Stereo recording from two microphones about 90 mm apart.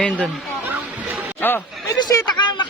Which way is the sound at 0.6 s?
20° right (ahead or behind).